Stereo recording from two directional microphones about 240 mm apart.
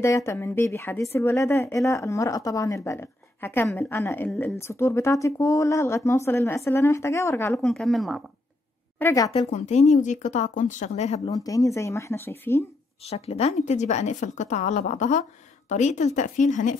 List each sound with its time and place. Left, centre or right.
0.0 s a woman's voice: centre
8.9 s a woman's voice: centre
9.5 s speech: left
11.3 s a woman's voice: centre
13.0 s speech: left